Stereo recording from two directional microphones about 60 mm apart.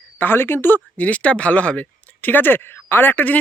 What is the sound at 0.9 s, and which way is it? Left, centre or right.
Speech, left.